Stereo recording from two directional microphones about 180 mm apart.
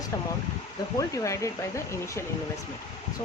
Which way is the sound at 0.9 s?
15° left (ahead or behind).